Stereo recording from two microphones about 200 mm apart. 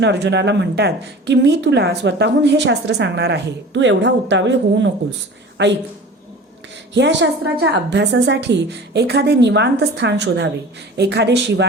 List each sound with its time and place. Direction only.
0.0 s a woman's voice: 60° right (ahead or behind)
6.9 s a woman's voice: 60° right (ahead or behind)